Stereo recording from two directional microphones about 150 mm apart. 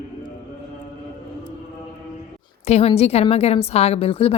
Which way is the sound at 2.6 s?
45° left (ahead or behind).